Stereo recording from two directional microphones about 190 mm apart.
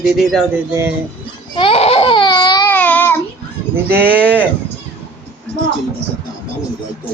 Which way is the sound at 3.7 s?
10° right (ahead or behind).